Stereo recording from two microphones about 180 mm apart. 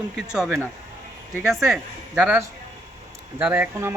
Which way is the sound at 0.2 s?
Centre (ahead or behind).